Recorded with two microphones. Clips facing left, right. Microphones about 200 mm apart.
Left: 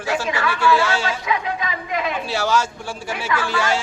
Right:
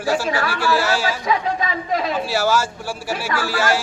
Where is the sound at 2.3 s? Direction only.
5° right (ahead or behind).